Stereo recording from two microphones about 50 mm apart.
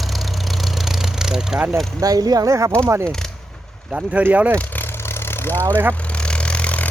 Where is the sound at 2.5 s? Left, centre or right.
Right.